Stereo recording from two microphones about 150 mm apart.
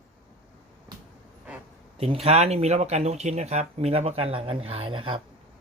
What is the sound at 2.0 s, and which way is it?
Speech, 40° right (ahead or behind).